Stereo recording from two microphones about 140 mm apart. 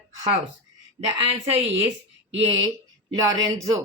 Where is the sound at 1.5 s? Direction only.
40° right (ahead or behind).